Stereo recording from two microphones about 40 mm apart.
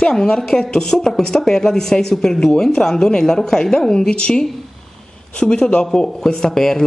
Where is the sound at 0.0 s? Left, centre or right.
Centre.